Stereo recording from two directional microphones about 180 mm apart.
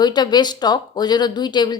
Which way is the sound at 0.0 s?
25° left (ahead or behind).